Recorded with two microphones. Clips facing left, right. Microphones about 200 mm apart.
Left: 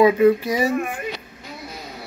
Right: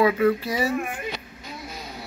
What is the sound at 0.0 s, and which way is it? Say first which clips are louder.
Speech: left 5 dB; 15° left (ahead or behind).